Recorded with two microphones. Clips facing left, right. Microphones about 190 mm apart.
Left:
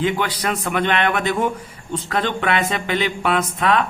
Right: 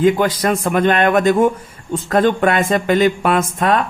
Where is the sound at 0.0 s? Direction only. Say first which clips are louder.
Right 7 dB; 45° right (ahead or behind).